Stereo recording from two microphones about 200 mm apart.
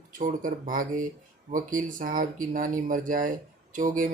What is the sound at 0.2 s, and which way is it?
Speech, 40° right (ahead or behind).